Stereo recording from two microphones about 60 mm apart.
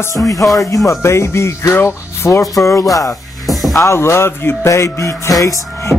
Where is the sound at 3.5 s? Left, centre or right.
Centre.